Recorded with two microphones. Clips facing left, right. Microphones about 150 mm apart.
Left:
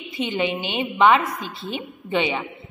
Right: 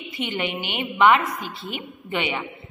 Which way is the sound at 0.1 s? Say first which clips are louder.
Left 4 dB; 20° left (ahead or behind).